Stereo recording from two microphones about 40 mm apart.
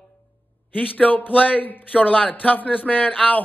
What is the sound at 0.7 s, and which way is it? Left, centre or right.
A man's voice, left.